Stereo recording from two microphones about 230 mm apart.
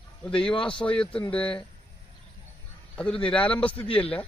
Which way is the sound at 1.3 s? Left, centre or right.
Centre.